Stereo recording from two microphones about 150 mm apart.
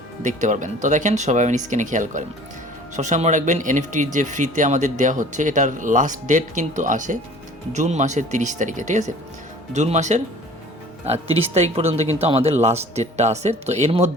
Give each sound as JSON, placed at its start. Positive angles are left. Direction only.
{"t": 0.2, "sound": "speech", "side_deg": -55}
{"t": 11.3, "sound": "speech", "side_deg": -45}